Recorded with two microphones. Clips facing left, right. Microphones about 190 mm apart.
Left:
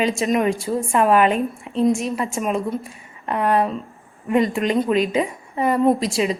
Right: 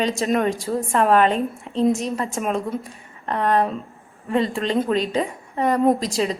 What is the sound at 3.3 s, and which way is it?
A woman's voice, 10° left (ahead or behind).